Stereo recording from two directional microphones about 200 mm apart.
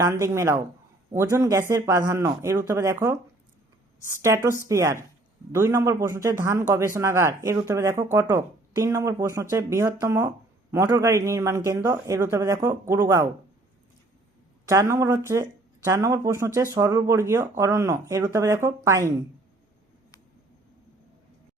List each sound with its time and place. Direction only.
0.0 s a man's voice: 15° right (ahead or behind)
4.2 s a man's voice: 15° right (ahead or behind)
14.7 s a man's voice: 15° right (ahead or behind)